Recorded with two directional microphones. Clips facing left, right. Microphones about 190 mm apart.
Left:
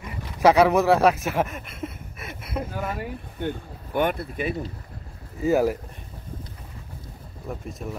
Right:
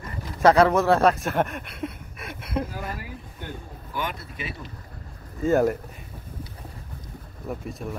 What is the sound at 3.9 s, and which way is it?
Speech, 55° left (ahead or behind).